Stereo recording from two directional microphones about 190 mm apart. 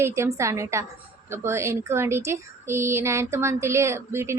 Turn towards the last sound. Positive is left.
turn(degrees=-15)  # may be behind; listen again after turning